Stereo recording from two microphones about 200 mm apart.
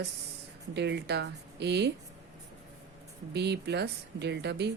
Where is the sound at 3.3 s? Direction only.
55° right (ahead or behind).